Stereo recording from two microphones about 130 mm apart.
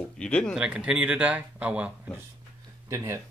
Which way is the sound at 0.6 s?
10° right (ahead or behind).